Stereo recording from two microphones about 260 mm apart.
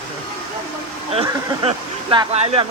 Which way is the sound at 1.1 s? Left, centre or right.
Right.